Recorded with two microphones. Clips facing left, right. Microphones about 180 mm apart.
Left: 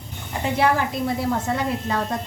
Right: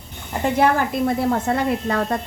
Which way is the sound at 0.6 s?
55° right (ahead or behind).